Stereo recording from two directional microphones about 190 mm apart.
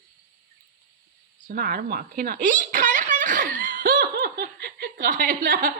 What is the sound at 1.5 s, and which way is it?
Speech, 50° right (ahead or behind).